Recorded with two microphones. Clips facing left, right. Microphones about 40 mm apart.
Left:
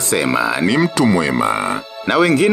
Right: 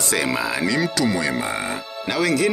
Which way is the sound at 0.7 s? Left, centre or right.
Left.